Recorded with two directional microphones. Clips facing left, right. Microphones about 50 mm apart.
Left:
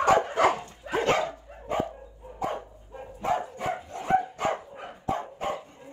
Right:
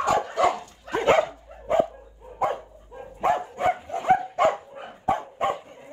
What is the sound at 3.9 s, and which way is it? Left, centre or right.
Dog, right.